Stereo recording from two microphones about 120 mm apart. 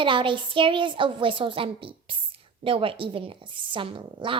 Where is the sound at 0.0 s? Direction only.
45° right (ahead or behind).